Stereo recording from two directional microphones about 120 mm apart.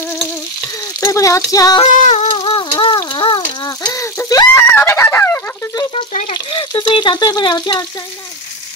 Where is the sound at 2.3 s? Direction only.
45° left (ahead or behind); by 5.7 s 20° left (ahead or behind).